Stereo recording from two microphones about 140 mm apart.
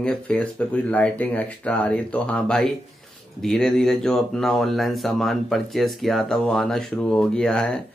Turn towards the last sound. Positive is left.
turn(degrees=5)  # may be behind; listen again after turning